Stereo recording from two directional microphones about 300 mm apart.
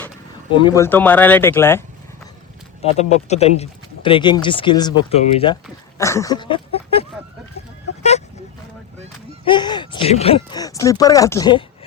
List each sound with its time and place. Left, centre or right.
0.6 s speech: centre
2.8 s speech: left
9.4 s speech: centre